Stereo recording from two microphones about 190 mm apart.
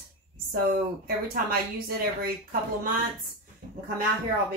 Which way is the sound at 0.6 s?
50° right (ahead or behind).